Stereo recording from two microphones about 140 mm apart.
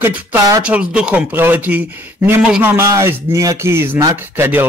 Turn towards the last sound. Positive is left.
turn(degrees=-15)  # may be behind; listen again after turning